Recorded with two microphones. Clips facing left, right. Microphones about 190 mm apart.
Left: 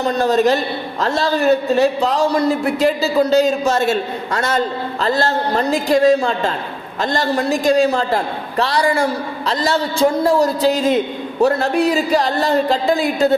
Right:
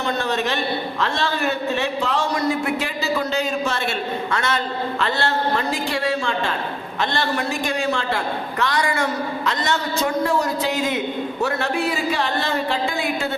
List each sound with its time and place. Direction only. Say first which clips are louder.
0.0 s a man's voice: left 8 dB; 40° left (ahead or behind)